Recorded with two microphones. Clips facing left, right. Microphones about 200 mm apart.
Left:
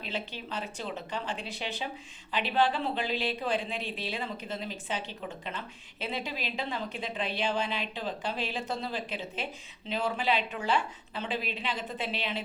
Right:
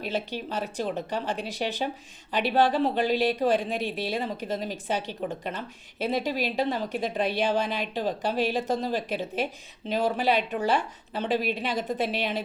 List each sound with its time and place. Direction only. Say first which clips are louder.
0.1 s a woman's voice: right 5 dB; 40° right (ahead or behind)